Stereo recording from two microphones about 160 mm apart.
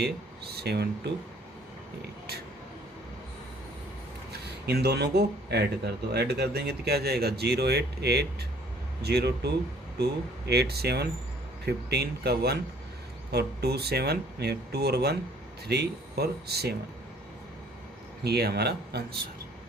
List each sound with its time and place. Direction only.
0.0 s speech: 85° right
4.3 s speech: 90° right
18.2 s speech: 90° right